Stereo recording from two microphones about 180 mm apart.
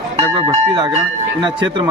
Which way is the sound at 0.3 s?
25° right (ahead or behind).